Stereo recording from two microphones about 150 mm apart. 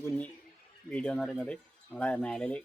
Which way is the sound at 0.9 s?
10° left (ahead or behind).